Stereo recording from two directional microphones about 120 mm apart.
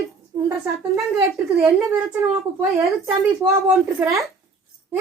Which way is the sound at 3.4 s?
25° right (ahead or behind).